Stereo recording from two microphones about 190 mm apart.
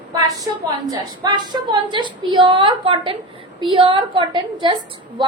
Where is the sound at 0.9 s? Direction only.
20° right (ahead or behind).